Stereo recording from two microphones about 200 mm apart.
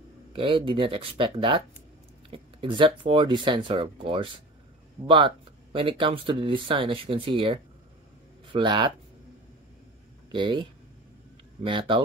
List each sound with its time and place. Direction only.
0.3 s speech: 25° right (ahead or behind)
10.3 s speech: 25° right (ahead or behind)